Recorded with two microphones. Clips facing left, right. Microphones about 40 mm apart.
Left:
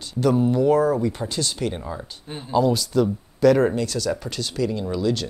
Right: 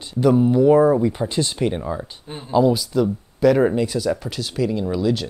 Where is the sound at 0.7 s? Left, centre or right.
Right.